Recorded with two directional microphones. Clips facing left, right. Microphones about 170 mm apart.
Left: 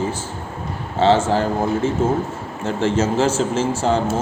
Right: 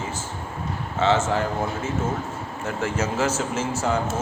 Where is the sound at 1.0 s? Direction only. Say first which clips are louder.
Left 5 dB; 30° left (ahead or behind).